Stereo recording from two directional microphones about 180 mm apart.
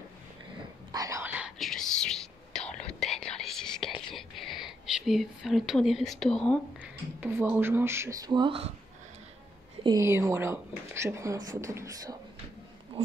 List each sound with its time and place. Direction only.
0.9 s whispering: 15° right (ahead or behind)
1.6 s whispering: 5° left (ahead or behind)
4.1 s speech: centre (ahead or behind)
6.8 s a woman's voice: 10° right (ahead or behind); by 8.7 s 30° right (ahead or behind)
9.8 s a woman's voice: 15° right (ahead or behind)